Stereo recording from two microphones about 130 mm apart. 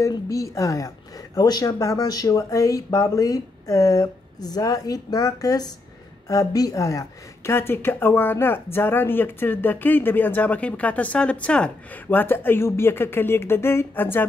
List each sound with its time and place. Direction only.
0.0 s a woman's voice: 25° left (ahead or behind)